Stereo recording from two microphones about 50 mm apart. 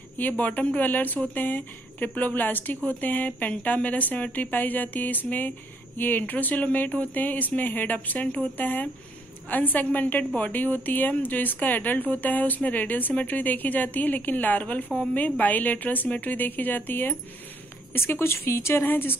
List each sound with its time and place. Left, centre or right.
0.2 s a woman's voice: left
17.9 s speech: left
18.9 s speech: left